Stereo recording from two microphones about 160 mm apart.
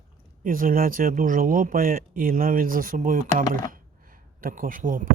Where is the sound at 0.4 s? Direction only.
60° right (ahead or behind).